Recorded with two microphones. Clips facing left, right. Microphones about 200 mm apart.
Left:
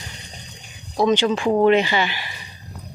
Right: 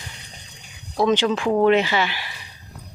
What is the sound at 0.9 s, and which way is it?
Speech, centre (ahead or behind).